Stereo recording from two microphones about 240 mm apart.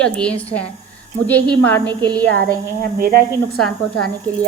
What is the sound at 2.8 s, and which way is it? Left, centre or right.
Speech, right.